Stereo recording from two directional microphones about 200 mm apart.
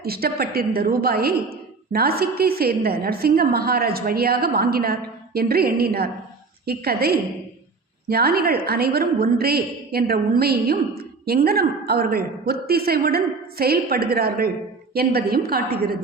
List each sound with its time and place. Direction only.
0.0 s a woman's voice: 50° right (ahead or behind)